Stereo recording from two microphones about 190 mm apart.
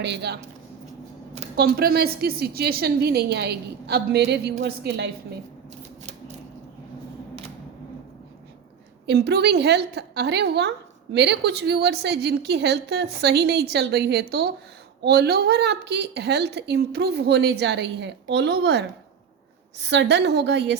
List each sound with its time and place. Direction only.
0.0 s a woman's voice: 65° right (ahead or behind)
1.5 s a woman's voice: 55° right (ahead or behind)
9.0 s a woman's voice: 60° right (ahead or behind)